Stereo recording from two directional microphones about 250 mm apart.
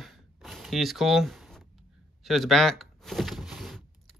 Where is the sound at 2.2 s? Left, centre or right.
Centre.